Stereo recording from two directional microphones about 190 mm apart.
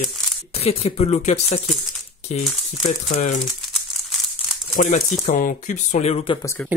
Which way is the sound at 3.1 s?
35° left (ahead or behind).